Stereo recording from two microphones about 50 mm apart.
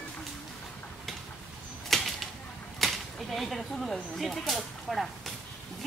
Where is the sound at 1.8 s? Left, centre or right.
Centre.